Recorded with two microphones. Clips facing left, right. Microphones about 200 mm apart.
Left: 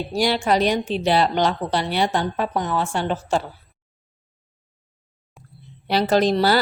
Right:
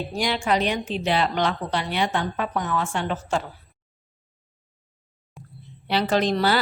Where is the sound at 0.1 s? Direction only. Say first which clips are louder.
Left 4 dB; 35° left (ahead or behind).